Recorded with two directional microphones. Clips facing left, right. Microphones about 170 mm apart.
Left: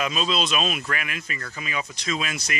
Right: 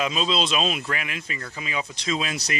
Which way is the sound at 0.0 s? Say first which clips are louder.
Right 1 dB; 25° right (ahead or behind).